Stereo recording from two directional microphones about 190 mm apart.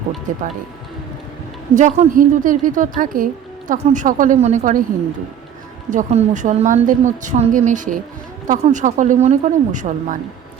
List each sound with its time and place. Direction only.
0.3 s a woman's voice: 40° right (ahead or behind)
1.7 s a woman's voice: 40° right (ahead or behind)
5.9 s a woman's voice: 40° right (ahead or behind)